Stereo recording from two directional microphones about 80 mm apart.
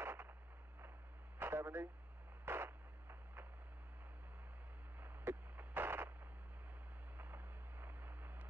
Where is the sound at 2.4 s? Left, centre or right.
Right.